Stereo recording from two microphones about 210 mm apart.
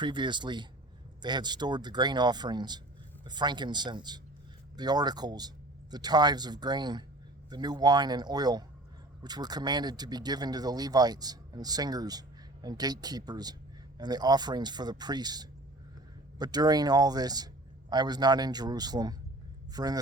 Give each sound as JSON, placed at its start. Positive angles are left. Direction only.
{"t": 0.0, "sound": "a man's voice", "side_deg": -20}